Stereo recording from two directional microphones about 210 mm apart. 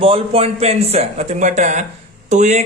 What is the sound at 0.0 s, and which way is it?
Speech, 25° right (ahead or behind).